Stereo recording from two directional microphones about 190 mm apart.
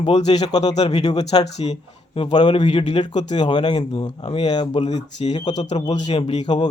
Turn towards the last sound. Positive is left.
turn(degrees=30)  # may be behind; listen again after turning